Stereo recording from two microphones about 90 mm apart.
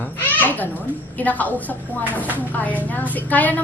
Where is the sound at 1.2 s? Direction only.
15° left (ahead or behind).